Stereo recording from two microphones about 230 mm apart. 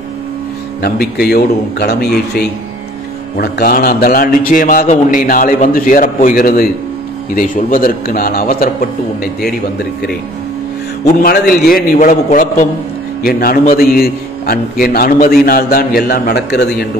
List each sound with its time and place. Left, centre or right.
0.8 s a man's voice: left
11.2 s a man's voice: left